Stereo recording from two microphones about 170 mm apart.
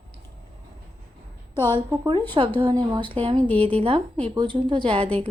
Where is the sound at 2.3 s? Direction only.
30° right (ahead or behind).